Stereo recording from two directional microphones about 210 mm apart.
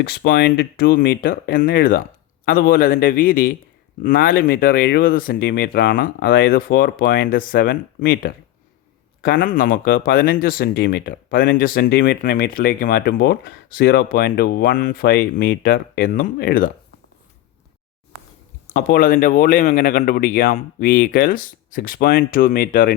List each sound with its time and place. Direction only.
0.0 s speech: 50° left (ahead or behind)
18.7 s speech: 40° left (ahead or behind)